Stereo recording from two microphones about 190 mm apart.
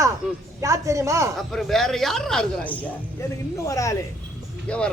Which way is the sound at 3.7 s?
15° left (ahead or behind).